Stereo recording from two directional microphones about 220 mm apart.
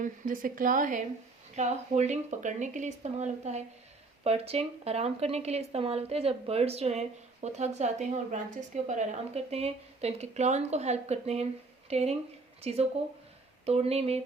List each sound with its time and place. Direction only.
0.0 s a woman's voice: 40° right (ahead or behind)